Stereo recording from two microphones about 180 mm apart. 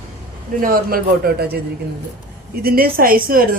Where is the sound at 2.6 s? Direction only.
55° right (ahead or behind).